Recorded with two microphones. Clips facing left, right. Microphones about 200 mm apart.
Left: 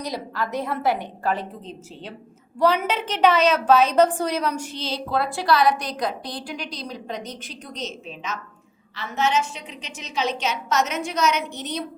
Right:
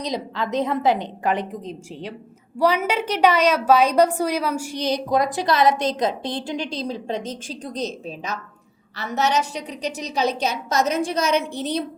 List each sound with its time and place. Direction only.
0.0 s a woman's voice: 20° right (ahead or behind)